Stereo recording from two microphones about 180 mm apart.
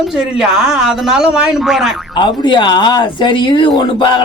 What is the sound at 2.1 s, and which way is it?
Speech, 25° left (ahead or behind).